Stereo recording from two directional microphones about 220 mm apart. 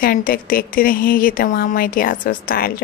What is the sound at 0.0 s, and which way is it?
A woman's voice, 40° left (ahead or behind).